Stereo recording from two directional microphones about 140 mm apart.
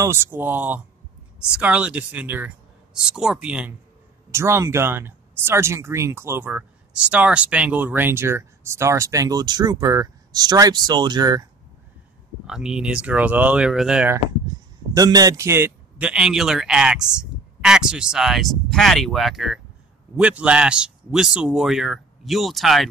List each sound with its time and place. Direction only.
0.0 s speech: 20° right (ahead or behind)
12.4 s speech: 5° right (ahead or behind)
15.0 s a man's voice: 25° right (ahead or behind); by 22.8 s centre (ahead or behind)